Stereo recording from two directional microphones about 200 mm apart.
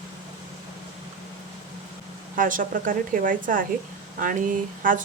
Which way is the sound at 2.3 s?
45° right (ahead or behind).